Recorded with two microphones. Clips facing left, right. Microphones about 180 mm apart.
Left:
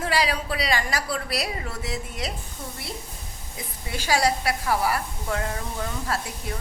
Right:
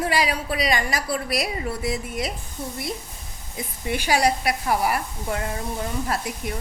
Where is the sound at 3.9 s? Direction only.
15° right (ahead or behind).